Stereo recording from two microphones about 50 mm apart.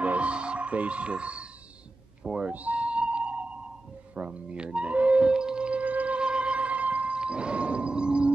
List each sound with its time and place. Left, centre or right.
0.0 s music: right
2.5 s music: right
4.1 s speech: right
5.2 s music: centre